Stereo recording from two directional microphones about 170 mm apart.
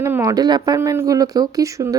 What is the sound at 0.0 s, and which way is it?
A woman's voice, 20° right (ahead or behind).